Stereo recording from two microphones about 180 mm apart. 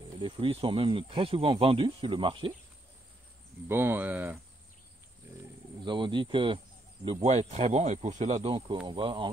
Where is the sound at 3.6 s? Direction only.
15° right (ahead or behind).